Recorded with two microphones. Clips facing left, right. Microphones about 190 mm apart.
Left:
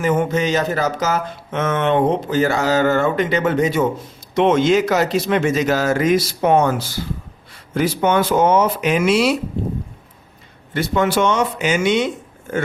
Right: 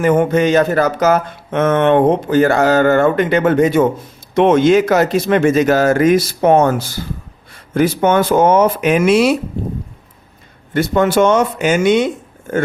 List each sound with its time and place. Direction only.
0.0 s speech: 55° right (ahead or behind)
10.8 s speech: 50° right (ahead or behind)